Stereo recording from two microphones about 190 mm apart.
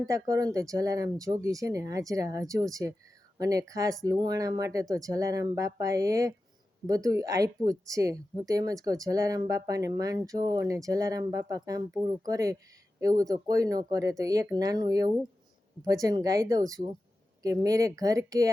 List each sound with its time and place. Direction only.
0.0 s speech: 15° right (ahead or behind)